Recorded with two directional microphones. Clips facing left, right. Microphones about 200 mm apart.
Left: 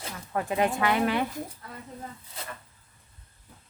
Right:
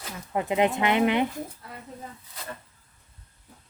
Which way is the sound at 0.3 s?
20° right (ahead or behind).